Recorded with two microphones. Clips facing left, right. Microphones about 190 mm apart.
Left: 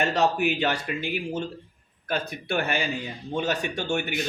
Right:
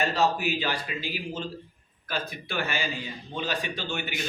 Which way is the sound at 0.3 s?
60° left (ahead or behind).